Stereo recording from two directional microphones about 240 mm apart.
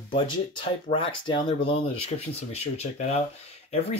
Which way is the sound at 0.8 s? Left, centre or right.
Left.